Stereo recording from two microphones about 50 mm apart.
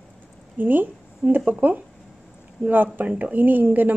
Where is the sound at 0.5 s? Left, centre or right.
Right.